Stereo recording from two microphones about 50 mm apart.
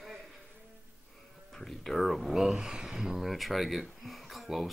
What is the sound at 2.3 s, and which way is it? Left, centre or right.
Speech, centre.